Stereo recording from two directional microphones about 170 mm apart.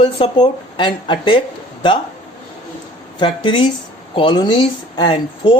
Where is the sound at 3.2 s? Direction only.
30° left (ahead or behind).